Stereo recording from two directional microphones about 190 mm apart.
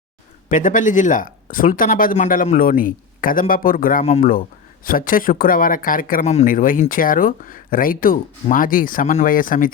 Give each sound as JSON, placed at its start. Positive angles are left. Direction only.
{"t": 0.4, "sound": "speech", "side_deg": 45}